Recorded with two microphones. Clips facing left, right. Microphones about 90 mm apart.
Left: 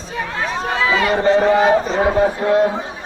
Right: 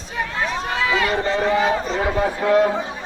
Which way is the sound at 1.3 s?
45° left (ahead or behind).